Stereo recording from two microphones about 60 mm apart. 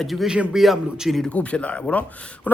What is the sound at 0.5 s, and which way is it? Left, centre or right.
Speech, centre.